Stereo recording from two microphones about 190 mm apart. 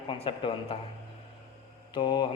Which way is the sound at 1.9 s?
25° left (ahead or behind).